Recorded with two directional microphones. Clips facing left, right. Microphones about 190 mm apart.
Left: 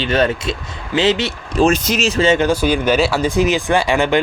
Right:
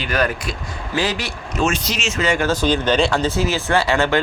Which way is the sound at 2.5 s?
10° left (ahead or behind).